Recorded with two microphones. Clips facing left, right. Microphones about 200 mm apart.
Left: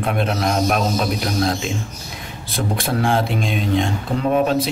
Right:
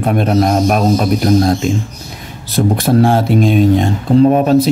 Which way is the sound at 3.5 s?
50° right (ahead or behind).